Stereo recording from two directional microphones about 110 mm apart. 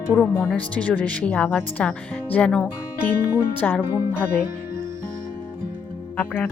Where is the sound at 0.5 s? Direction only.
10° left (ahead or behind).